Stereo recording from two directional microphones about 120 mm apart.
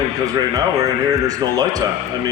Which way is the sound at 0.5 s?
30° right (ahead or behind).